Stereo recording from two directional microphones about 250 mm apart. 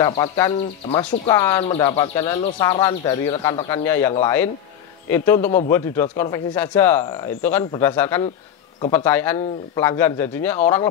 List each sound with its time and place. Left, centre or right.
0.0 s speech: centre